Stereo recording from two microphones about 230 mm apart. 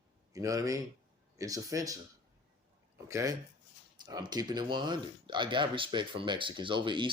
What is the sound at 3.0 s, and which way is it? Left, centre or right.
Speech, centre.